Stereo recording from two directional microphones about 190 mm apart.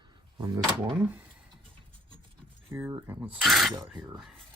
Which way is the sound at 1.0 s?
10° right (ahead or behind).